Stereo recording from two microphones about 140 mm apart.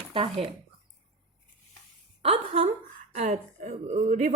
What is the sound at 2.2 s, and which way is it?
A woman's voice, 45° right (ahead or behind).